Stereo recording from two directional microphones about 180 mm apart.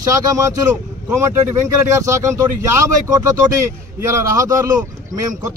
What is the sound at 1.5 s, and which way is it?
A man's voice, 15° right (ahead or behind).